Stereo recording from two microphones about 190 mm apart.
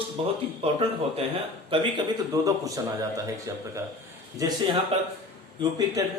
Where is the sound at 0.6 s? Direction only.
30° right (ahead or behind).